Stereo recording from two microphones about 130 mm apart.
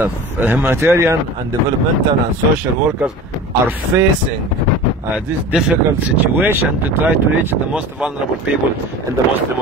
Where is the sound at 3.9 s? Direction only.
15° right (ahead or behind).